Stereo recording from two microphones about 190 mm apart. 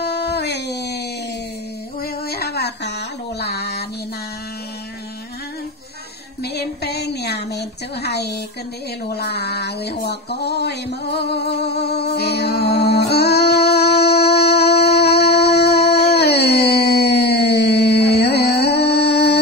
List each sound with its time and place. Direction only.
0.0 s a sound: 60° left (ahead or behind)
6.4 s a woman's voice: 60° left (ahead or behind)
9.1 s music: 60° left (ahead or behind)